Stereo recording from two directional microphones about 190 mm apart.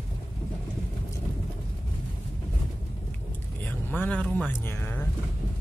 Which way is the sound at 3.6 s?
10° left (ahead or behind).